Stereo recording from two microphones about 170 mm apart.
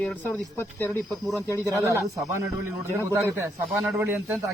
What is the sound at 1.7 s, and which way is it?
Speech, 15° right (ahead or behind).